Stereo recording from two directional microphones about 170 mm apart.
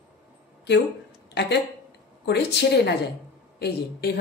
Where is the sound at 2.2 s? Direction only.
80° left.